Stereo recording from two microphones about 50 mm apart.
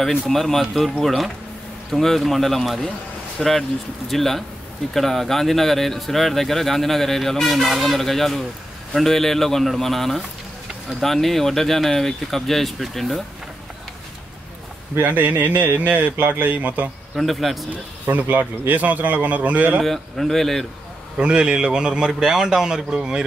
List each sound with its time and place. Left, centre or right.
0.3 s speech: centre
15.0 s a man's voice: right
17.1 s speech: centre
18.0 s a man's voice: right
19.8 s speech: centre
21.2 s a man's voice: right